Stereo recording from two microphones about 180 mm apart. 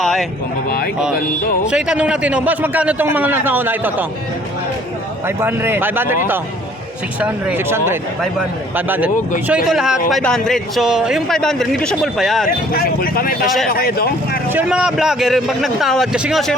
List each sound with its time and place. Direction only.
0.0 s a sound: centre (ahead or behind)
1.6 s a man's voice: 5° right (ahead or behind)
5.2 s a man's voice: 10° right (ahead or behind)
7.2 s a man's voice: 10° right (ahead or behind)
12.5 s speech: 55° left (ahead or behind)
14.5 s a man's voice: 5° right (ahead or behind)